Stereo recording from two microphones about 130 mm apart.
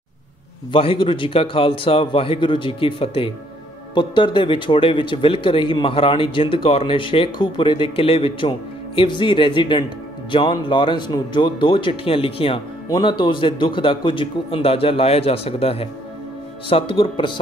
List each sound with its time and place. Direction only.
0.7 s a man's voice: 45° left (ahead or behind)